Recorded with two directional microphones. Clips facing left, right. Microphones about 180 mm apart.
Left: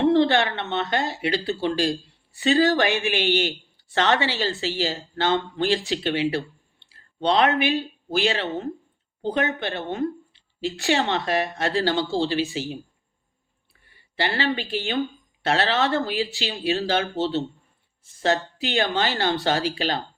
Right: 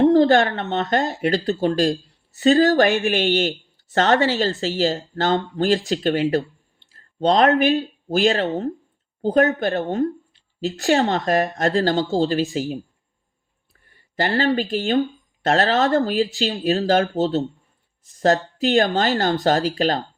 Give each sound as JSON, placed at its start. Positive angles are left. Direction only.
{"t": 0.0, "sound": "a woman's voice", "side_deg": -40}
{"t": 13.8, "sound": "speech", "side_deg": -45}
{"t": 18.6, "sound": "speech", "side_deg": -40}